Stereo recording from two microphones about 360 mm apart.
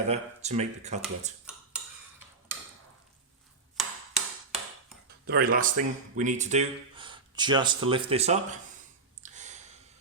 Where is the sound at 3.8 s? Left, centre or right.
Centre.